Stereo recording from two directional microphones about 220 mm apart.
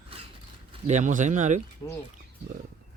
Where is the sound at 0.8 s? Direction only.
35° right (ahead or behind).